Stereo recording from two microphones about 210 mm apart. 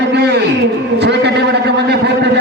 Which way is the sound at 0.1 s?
55° right (ahead or behind).